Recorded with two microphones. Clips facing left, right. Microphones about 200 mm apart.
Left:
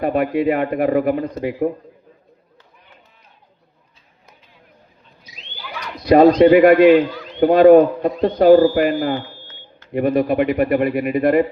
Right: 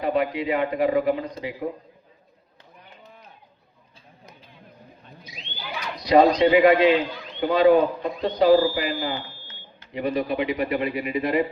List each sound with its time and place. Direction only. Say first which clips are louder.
0.0 s a man's voice: left 6 dB; 55° left (ahead or behind)
6.0 s a man's voice: left 7 dB; 55° left (ahead or behind)